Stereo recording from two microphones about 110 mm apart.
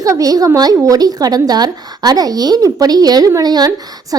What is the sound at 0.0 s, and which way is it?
A woman's voice, 30° right (ahead or behind).